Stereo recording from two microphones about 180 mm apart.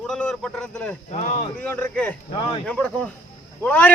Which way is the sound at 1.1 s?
40° left (ahead or behind).